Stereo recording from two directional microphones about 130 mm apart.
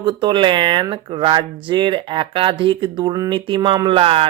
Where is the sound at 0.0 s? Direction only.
35° right (ahead or behind).